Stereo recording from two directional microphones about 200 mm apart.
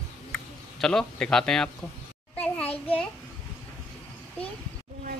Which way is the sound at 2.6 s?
30° left (ahead or behind).